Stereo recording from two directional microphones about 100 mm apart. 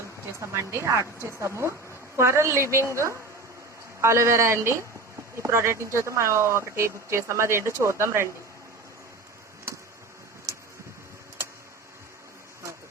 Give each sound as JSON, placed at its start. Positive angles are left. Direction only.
{"t": 0.3, "sound": "speech", "side_deg": -25}